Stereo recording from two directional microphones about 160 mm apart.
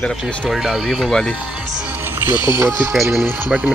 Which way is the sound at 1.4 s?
5° right (ahead or behind).